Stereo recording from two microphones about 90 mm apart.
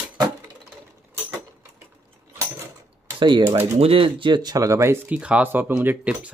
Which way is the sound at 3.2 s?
55° right (ahead or behind).